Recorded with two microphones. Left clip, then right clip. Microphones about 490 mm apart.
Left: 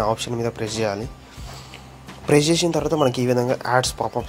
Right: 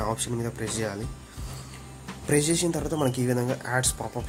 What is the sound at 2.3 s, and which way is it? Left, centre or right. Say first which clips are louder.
Speech: left 7 dB; right.